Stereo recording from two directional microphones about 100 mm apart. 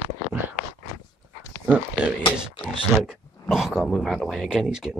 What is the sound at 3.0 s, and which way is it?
Speech, 5° right (ahead or behind).